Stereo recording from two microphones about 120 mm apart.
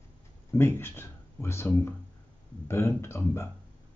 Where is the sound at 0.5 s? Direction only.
20° left (ahead or behind).